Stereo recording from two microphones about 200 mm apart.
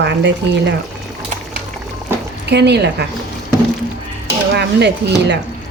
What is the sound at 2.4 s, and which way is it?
Speech, 55° right (ahead or behind).